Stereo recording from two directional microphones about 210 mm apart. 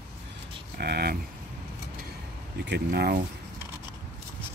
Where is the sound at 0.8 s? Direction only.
50° right (ahead or behind).